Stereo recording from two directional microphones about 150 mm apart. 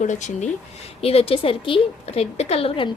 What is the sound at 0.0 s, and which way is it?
Speech, 55° left (ahead or behind).